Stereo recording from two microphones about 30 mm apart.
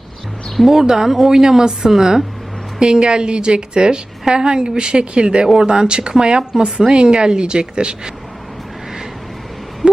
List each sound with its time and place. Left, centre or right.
0.7 s a woman's voice: centre
2.7 s a woman's voice: right